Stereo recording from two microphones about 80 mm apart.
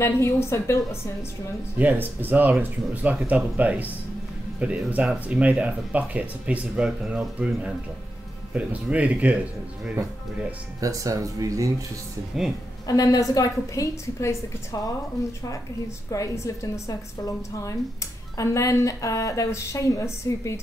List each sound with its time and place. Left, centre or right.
0.0 s speech: left
1.8 s speech: right
8.9 s speech: centre
10.8 s speech: right
12.8 s a woman's voice: left
16.1 s a woman's voice: left